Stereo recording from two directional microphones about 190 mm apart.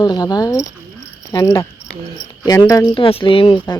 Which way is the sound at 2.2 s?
25° left (ahead or behind).